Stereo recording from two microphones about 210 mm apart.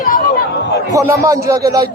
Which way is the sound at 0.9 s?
15° right (ahead or behind).